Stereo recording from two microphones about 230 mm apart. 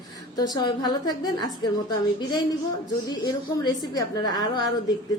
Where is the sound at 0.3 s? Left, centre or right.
Centre.